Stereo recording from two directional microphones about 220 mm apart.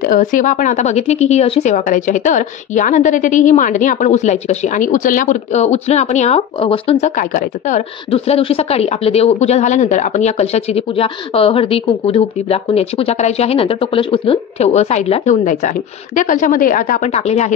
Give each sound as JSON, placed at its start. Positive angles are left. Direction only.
{"t": 0.0, "sound": "speech", "side_deg": 40}